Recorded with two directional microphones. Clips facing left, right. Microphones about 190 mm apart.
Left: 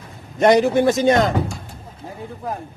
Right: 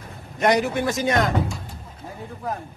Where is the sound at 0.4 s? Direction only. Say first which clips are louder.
Left 6 dB; 30° left (ahead or behind).